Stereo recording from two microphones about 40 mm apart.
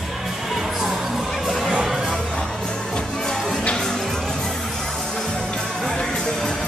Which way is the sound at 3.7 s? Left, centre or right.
Centre.